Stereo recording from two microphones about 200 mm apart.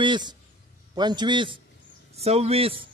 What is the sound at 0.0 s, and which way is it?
A man's voice, 20° right (ahead or behind).